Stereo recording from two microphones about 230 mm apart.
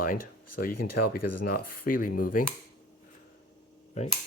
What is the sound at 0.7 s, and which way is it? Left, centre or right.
Speech, left.